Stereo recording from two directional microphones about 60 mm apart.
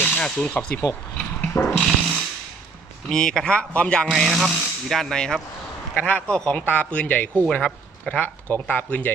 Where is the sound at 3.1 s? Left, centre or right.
Centre.